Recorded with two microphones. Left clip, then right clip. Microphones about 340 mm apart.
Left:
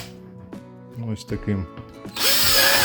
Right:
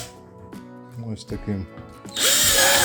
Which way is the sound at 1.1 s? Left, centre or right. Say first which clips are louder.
Left 3 dB; centre.